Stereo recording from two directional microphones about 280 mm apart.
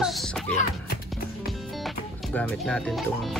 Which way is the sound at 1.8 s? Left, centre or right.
Centre.